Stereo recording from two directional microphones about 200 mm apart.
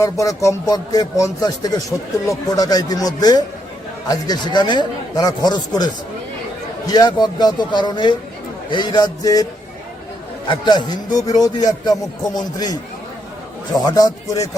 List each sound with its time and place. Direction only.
0.0 s speech: 15° left (ahead or behind)
10.5 s speech: 20° left (ahead or behind)
13.7 s speech: 20° left (ahead or behind)